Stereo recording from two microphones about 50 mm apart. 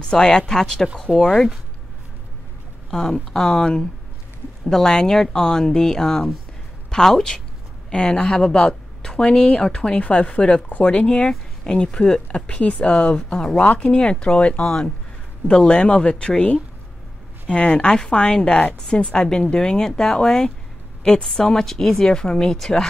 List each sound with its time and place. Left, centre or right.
0.0 s speech: centre
2.9 s speech: centre